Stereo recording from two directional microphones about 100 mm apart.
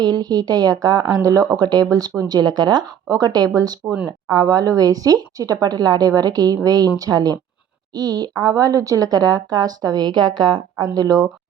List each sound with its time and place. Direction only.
0.0 s a woman's voice: 45° right (ahead or behind)